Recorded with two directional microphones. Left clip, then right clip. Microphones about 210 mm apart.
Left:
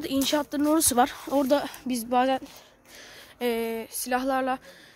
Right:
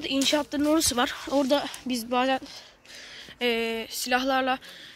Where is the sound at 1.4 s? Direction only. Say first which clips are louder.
Left 1 dB; 20° left (ahead or behind); by 4.6 s 5° left (ahead or behind).